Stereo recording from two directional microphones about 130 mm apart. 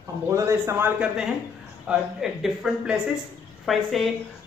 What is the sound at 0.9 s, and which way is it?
A woman's voice, 5° right (ahead or behind).